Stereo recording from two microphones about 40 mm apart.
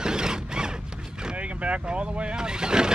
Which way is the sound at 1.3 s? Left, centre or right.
Right.